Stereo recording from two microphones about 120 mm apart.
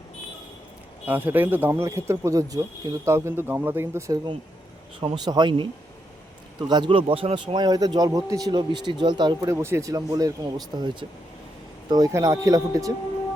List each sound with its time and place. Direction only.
1.0 s speech: 15° right (ahead or behind)
4.9 s a man's voice: 40° right (ahead or behind)
9.5 s speech: 20° right (ahead or behind)